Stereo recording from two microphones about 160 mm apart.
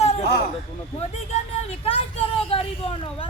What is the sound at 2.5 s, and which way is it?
Speech, 35° left (ahead or behind).